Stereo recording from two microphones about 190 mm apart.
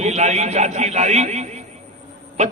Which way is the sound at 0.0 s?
35° right (ahead or behind).